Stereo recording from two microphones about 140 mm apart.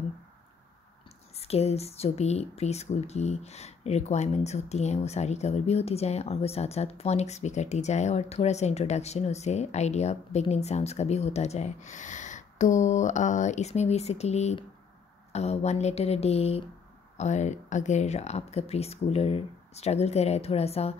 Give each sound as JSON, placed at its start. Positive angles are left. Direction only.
{"t": 1.3, "sound": "speech", "side_deg": 45}